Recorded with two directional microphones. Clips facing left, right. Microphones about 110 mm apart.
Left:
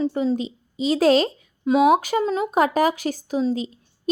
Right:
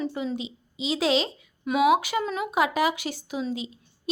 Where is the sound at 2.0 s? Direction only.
40° left (ahead or behind).